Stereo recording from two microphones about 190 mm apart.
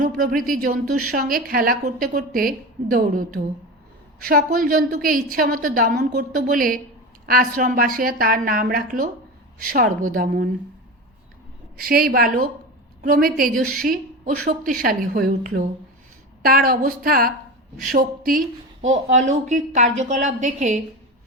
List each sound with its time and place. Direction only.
0.0 s a woman's voice: 45° right (ahead or behind)
11.8 s a woman's voice: 50° right (ahead or behind)